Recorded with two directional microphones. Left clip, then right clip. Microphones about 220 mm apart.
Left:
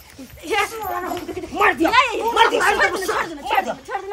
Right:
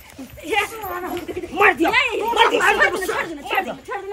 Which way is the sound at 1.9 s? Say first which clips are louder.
Left 2 dB; 15° left (ahead or behind).